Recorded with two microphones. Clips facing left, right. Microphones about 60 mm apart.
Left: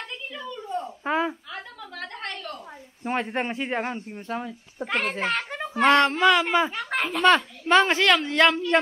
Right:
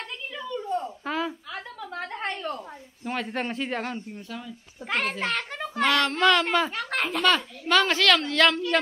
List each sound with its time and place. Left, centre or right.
0.4 s a sound: centre
1.0 s speech: left
2.0 s a sound: right
3.0 s a woman's voice: left
4.3 s speech: left
4.8 s a child's voice: centre
5.8 s a woman's voice: left
6.1 s speech: centre
6.7 s a child's voice: centre
7.2 s a woman's voice: left